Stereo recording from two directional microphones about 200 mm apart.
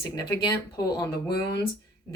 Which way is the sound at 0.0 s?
20° left (ahead or behind).